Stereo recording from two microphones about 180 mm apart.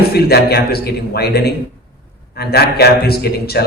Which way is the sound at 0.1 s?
60° left (ahead or behind).